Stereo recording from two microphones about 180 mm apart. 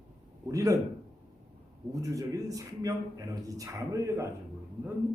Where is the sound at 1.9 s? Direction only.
20° right (ahead or behind).